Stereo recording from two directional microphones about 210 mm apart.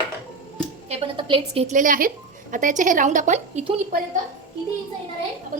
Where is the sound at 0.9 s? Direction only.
25° right (ahead or behind).